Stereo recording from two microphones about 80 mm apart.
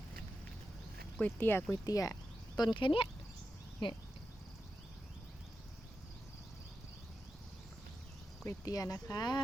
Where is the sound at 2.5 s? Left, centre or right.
Left.